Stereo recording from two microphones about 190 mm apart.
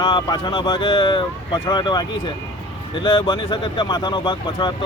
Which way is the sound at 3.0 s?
25° left (ahead or behind).